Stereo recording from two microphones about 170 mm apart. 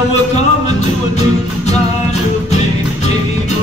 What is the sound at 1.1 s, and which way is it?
Music, 40° left (ahead or behind).